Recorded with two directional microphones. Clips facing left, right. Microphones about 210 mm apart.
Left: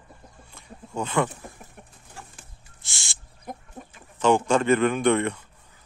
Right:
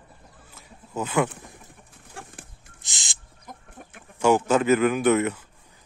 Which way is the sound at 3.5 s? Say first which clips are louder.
Left 6 dB; 60° left (ahead or behind).